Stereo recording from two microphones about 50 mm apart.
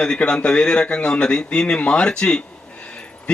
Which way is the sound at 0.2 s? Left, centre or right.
Left.